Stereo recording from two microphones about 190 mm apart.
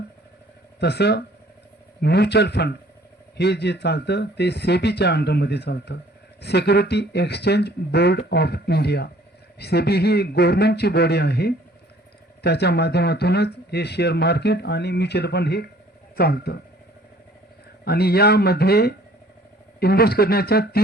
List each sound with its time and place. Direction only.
0.8 s speech: 60° left (ahead or behind)
17.8 s speech: 55° left (ahead or behind)